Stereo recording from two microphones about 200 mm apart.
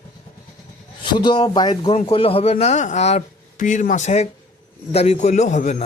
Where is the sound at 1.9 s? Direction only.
30° left (ahead or behind).